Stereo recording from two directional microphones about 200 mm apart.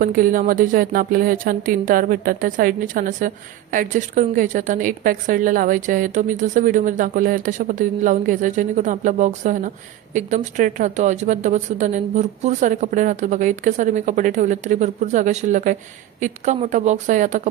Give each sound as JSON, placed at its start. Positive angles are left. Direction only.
{"t": 0.0, "sound": "speech", "side_deg": -45}